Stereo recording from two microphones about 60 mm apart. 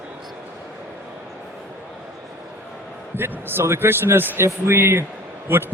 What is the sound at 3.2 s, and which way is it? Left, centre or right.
A man's voice, right.